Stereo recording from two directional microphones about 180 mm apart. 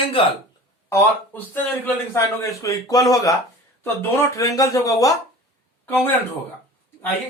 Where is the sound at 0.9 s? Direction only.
15° left (ahead or behind).